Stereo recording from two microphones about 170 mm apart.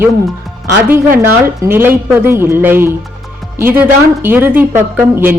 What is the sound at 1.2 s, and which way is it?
A woman's voice, 15° right (ahead or behind).